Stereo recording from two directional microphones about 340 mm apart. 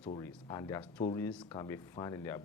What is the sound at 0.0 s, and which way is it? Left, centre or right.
Speech, centre.